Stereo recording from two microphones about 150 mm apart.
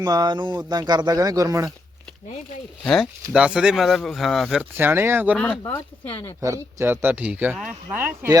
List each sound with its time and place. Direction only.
0.0 s speech: 25° right (ahead or behind)
2.8 s speech: centre (ahead or behind)
4.8 s speech: 15° right (ahead or behind)
5.7 s speech: 15° left (ahead or behind)
6.4 s speech: 20° right (ahead or behind); by 7.8 s centre (ahead or behind)
7.9 s speech: 10° right (ahead or behind)